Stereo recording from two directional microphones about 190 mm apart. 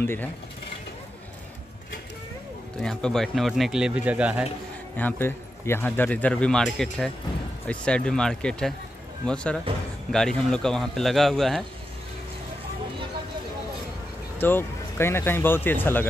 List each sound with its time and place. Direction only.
0.0 s speech: 10° left (ahead or behind)
2.8 s speech: 5° left (ahead or behind)
4.9 s speech: 10° left (ahead or behind)
14.4 s speech: 10° left (ahead or behind)